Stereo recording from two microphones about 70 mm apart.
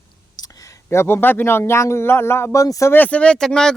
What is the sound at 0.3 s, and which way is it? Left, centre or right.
Speech, left.